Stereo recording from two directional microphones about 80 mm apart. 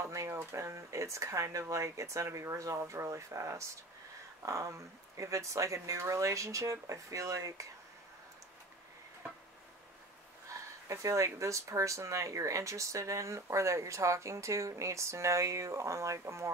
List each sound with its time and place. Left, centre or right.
0.1 s a sound: right
0.5 s speech: right
10.9 s speech: right